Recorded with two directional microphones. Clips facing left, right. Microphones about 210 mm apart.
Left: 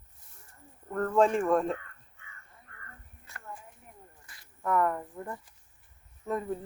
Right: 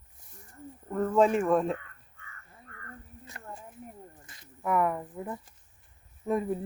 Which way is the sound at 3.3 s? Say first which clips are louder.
Right 1 dB; 20° right (ahead or behind).